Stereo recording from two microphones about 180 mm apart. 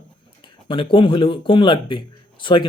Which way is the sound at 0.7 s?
30° left (ahead or behind).